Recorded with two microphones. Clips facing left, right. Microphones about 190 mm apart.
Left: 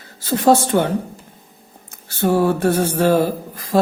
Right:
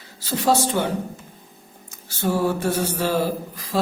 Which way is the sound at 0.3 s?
55° left (ahead or behind).